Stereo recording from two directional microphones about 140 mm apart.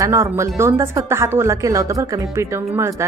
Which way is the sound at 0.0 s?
20° right (ahead or behind).